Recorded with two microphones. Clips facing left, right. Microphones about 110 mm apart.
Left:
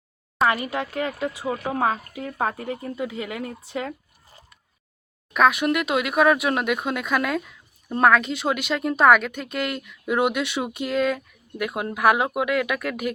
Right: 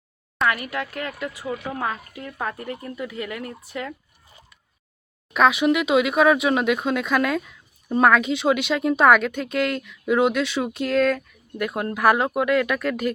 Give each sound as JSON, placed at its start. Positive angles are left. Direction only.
{"t": 0.4, "sound": "speech", "side_deg": 25}
{"t": 4.3, "sound": "a sound", "side_deg": 35}
{"t": 5.3, "sound": "speech", "side_deg": 0}